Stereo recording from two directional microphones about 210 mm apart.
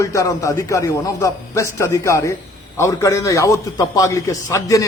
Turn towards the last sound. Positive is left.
turn(degrees=15)  # may be behind; listen again after turning